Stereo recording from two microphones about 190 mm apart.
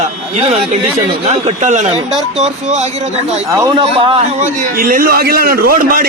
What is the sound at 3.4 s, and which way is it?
Speech, 15° right (ahead or behind).